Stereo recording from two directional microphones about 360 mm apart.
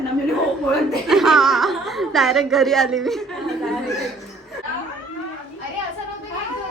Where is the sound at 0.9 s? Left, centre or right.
Centre.